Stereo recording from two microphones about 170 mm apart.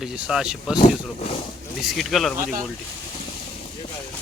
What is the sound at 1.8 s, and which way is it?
Speech, centre (ahead or behind).